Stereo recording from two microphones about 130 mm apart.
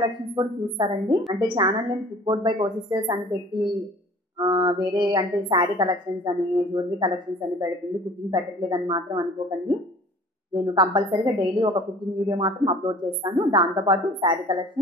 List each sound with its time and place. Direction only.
0.0 s a woman's voice: 35° right (ahead or behind)
4.4 s a woman's voice: 35° right (ahead or behind)
10.5 s a woman's voice: 30° right (ahead or behind)